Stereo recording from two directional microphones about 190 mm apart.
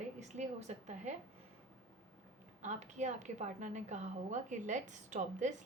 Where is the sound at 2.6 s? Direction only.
40° right (ahead or behind).